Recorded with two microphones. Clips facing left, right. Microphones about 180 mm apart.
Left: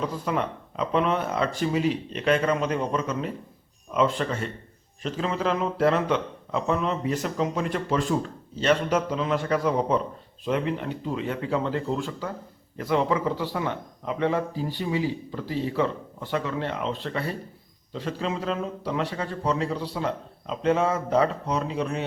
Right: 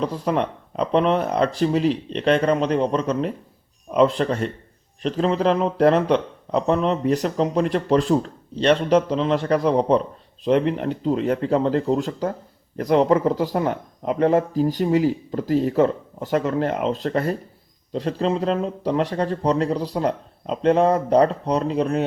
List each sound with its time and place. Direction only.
0.0 s speech: 35° right (ahead or behind)